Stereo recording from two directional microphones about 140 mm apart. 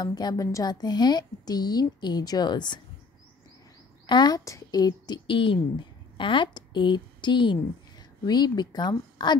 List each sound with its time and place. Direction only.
0.0 s a woman's voice: 30° left (ahead or behind)
4.0 s speech: 30° left (ahead or behind)